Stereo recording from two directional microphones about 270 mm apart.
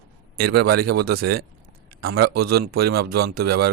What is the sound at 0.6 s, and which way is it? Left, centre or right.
Speech, right.